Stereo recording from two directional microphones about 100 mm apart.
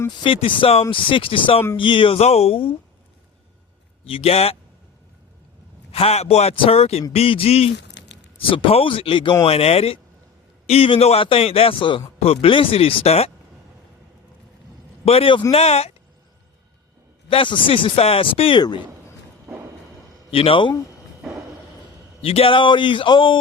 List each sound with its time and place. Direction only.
0.2 s a man's voice: 55° left (ahead or behind); by 2.6 s 80° left
4.0 s speech: 80° left
5.9 s a man's voice: 90° left
7.1 s speech: 75° left (ahead or behind)
8.4 s speech: 65° left (ahead or behind)
9.4 s speech: 85° left
10.7 s a man's voice: 70° left (ahead or behind)
12.2 s speech: 75° left (ahead or behind)
15.0 s a man's voice: 80° left; by 15.4 s 60° left (ahead or behind)
15.5 s a man's voice: 90° left
17.2 s speech: 60° left (ahead or behind)
20.3 s speech: 65° left (ahead or behind)
21.2 s a sound: centre (ahead or behind)
22.2 s speech: 70° left (ahead or behind); by 23.4 s 55° left (ahead or behind)